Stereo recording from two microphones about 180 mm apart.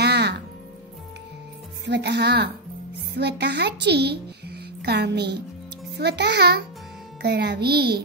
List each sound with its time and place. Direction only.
0.0 s music: 65° right (ahead or behind)
1.9 s a child's voice: 70° right (ahead or behind)